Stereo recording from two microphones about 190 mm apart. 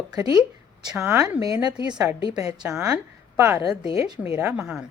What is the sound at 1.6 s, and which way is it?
Speech, 20° right (ahead or behind).